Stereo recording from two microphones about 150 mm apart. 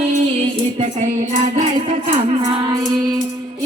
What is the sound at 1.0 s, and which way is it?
Music, 55° right (ahead or behind).